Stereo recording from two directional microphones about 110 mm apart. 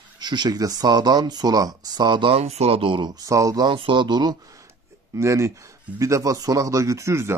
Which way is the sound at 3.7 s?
50° right (ahead or behind).